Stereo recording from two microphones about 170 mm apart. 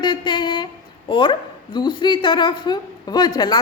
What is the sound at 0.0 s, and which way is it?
Speech, 25° left (ahead or behind).